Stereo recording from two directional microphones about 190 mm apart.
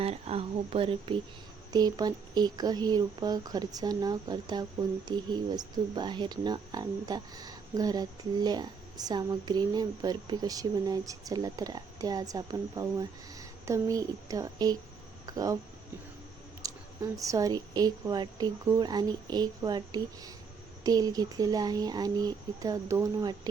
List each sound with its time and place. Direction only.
0.0 s speech: 30° right (ahead or behind)
16.6 s speech: 15° right (ahead or behind)